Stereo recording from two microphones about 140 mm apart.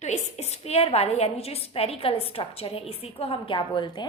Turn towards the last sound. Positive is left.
turn(degrees=35)  # may be behind; listen again after turning